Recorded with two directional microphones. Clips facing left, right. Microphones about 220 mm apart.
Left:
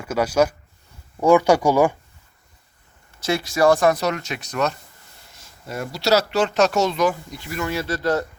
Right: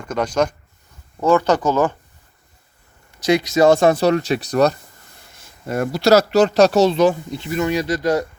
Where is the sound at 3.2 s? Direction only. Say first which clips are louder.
Right 4 dB; 20° right (ahead or behind); by 4.8 s 35° right (ahead or behind).